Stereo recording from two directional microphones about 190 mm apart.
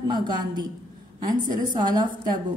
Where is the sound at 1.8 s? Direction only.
20° right (ahead or behind).